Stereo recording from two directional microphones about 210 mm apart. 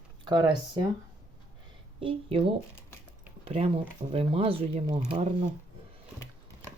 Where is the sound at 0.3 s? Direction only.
20° right (ahead or behind).